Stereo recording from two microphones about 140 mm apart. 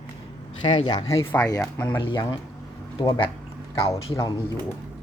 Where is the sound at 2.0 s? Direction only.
35° left (ahead or behind).